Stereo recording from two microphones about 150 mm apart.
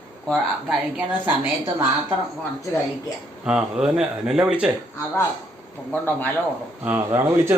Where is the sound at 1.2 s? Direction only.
10° right (ahead or behind).